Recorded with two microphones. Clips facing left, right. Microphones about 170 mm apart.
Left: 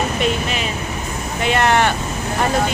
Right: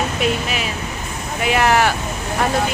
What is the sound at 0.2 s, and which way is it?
Vehicle, 5° right (ahead or behind).